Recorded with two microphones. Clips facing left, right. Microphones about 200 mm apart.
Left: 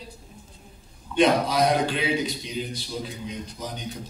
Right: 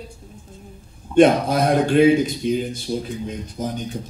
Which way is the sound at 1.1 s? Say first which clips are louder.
Right 6 dB; 50° right (ahead or behind).